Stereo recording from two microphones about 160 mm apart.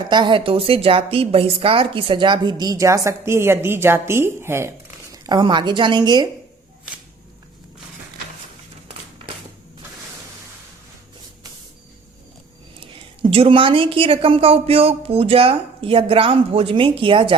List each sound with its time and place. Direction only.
0.1 s a woman's voice: 30° right (ahead or behind)
5.1 s a woman's voice: 25° right (ahead or behind)
12.8 s a woman's voice: 35° right (ahead or behind)